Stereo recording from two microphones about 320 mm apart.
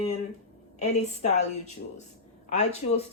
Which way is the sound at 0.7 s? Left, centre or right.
Left.